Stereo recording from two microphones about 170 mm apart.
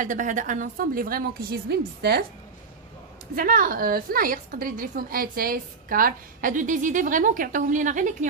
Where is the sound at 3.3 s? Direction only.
55° right (ahead or behind).